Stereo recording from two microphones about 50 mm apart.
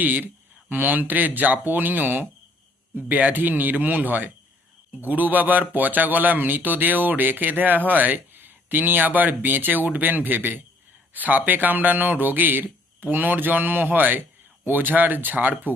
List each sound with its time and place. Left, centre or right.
0.0 s a man's voice: right